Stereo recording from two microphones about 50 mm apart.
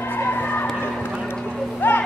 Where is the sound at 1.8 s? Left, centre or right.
Left.